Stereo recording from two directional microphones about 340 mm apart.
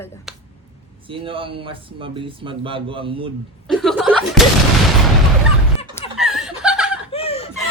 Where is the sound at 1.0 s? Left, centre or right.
Centre.